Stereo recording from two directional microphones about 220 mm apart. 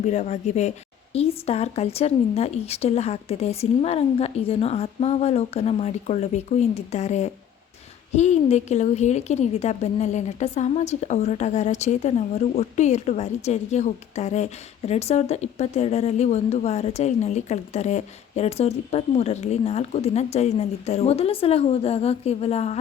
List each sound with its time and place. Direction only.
0.0 s a woman's voice: 30° left (ahead or behind)